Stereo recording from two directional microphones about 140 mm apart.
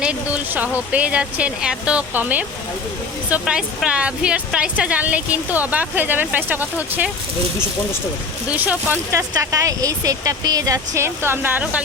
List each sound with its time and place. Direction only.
0.0 s speech: 10° right (ahead or behind)
8.4 s speech: 10° right (ahead or behind)
9.3 s speech: 25° right (ahead or behind)